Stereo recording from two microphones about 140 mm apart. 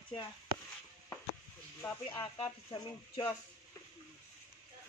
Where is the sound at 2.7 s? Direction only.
30° left (ahead or behind).